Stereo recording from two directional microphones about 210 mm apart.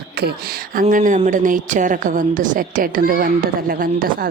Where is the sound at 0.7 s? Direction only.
40° right (ahead or behind).